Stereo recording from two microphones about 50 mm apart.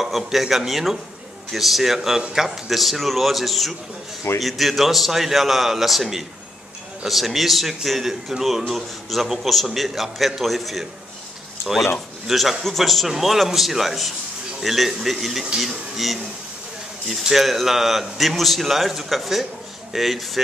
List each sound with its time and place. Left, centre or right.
0.0 s speech: centre